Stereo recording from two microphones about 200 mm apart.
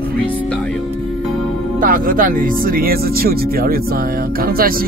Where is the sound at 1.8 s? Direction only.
45° right (ahead or behind).